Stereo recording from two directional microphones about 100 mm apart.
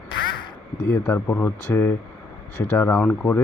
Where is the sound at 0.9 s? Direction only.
20° left (ahead or behind).